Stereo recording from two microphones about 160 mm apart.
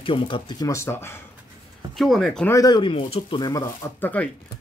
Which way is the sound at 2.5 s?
25° left (ahead or behind).